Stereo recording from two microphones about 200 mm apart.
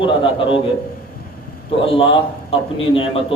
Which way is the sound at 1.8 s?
25° left (ahead or behind).